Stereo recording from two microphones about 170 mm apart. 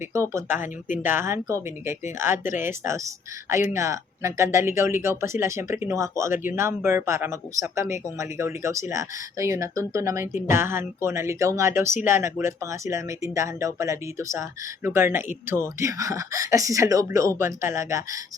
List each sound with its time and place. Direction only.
0.1 s speech: 15° right (ahead or behind)